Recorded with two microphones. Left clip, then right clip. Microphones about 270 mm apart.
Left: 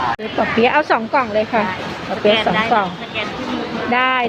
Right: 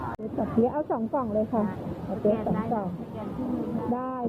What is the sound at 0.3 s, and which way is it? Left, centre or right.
Speech, left.